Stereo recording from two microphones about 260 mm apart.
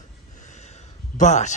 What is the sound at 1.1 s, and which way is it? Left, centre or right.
Speech, left.